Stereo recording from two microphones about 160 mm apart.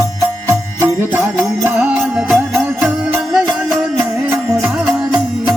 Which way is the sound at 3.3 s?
Centre (ahead or behind).